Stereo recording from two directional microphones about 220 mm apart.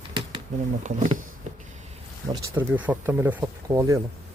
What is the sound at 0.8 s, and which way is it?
Speech, 35° right (ahead or behind).